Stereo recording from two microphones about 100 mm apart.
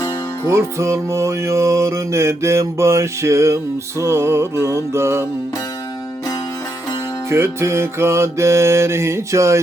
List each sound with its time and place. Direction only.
0.4 s music: 30° right (ahead or behind)
7.3 s music: 25° right (ahead or behind)